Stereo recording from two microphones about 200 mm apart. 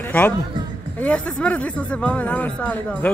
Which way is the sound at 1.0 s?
5° left (ahead or behind).